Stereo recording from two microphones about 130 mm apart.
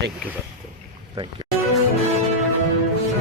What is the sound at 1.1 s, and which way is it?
Speech, 40° right (ahead or behind).